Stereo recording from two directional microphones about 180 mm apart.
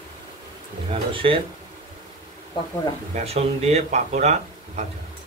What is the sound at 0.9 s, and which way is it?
Speech, 30° right (ahead or behind).